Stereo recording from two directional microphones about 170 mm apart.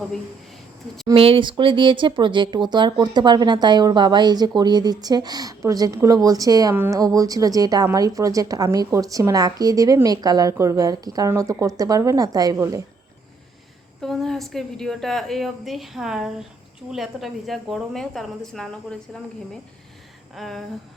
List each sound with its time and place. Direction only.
1.0 s a woman's voice: 35° right (ahead or behind)
14.0 s a woman's voice: centre (ahead or behind)
20.3 s a woman's voice: centre (ahead or behind)